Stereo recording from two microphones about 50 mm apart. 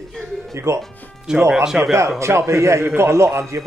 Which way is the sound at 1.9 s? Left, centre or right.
Right.